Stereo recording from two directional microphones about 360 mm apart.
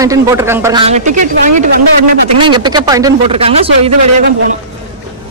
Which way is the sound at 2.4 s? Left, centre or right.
Centre.